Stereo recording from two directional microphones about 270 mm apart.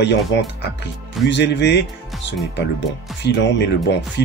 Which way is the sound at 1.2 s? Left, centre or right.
Left.